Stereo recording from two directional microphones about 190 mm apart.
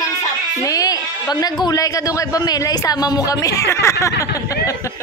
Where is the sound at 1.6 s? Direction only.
20° left (ahead or behind).